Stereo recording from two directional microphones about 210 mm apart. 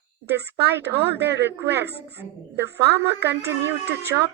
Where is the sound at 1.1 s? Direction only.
55° right (ahead or behind).